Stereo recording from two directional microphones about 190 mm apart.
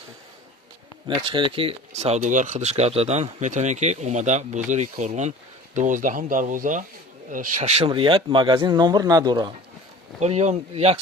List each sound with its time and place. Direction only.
1.0 s speech: 25° right (ahead or behind)
10.2 s speech: 35° right (ahead or behind)